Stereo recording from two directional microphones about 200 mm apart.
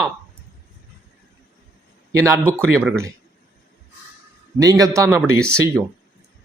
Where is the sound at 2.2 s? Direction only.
15° right (ahead or behind).